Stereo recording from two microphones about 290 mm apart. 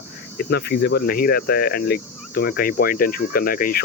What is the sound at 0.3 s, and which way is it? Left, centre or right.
Speech, left.